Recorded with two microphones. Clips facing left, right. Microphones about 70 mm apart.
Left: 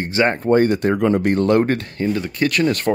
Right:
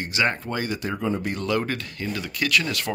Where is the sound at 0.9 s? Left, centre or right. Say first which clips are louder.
Left 10 dB; left.